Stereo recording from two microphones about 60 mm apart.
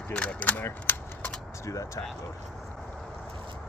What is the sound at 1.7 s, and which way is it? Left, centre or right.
Speech, left.